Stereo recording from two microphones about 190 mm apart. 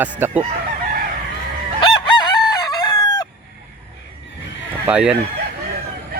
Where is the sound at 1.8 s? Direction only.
25° left (ahead or behind).